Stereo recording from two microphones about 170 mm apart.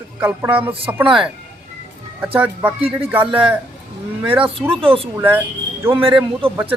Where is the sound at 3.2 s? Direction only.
30° right (ahead or behind).